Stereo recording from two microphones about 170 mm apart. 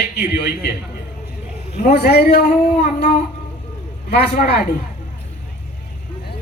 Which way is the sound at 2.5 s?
45° left (ahead or behind).